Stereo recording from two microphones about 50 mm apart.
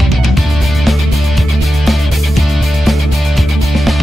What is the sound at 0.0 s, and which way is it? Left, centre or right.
Music, centre.